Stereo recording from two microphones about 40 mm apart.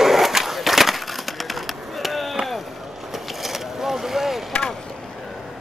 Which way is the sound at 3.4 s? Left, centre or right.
Centre.